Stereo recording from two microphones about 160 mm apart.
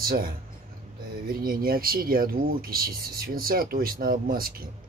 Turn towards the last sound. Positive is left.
turn(degrees=-65)  # may be behind; listen again after turning